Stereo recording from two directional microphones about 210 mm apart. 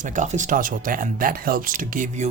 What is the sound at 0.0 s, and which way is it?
Speech, 35° right (ahead or behind).